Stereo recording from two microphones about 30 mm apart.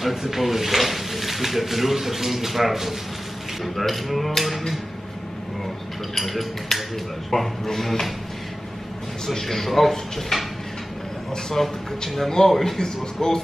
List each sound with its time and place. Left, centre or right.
0.0 s speech: centre
6.1 s speech: centre
9.2 s speech: centre
11.6 s speech: centre
12.8 s speech: left